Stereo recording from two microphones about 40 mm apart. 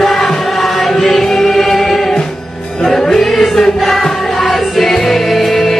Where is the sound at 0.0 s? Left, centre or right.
Centre.